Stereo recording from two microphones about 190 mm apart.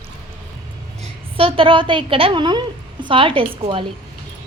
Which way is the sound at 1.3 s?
30° right (ahead or behind).